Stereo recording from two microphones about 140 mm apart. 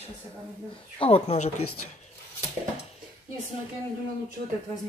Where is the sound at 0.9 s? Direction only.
40° left (ahead or behind).